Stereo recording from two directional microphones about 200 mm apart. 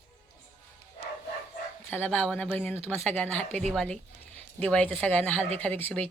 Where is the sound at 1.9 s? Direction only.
10° left (ahead or behind).